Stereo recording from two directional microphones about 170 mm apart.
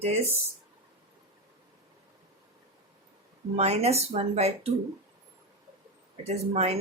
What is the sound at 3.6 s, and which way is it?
Speech, 40° right (ahead or behind).